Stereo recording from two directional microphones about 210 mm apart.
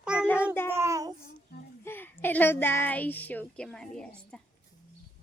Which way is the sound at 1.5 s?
50° left (ahead or behind).